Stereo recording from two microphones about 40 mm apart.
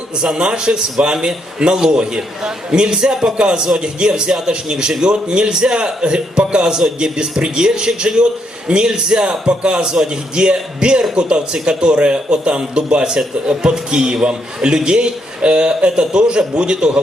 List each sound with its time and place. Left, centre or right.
0.3 s a man's voice: right